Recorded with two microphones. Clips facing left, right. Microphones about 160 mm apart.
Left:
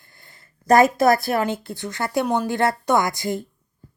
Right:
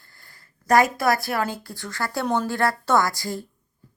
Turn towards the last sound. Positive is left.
turn(degrees=20)  # may be behind; listen again after turning